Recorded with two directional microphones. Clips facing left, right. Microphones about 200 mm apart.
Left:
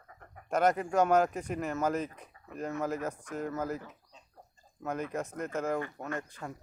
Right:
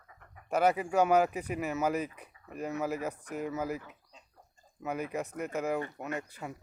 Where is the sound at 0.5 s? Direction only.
5° right (ahead or behind).